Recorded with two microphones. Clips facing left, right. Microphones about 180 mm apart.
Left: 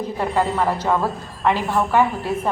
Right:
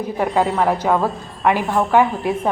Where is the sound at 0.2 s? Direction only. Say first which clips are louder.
Right 3 dB; 15° right (ahead or behind).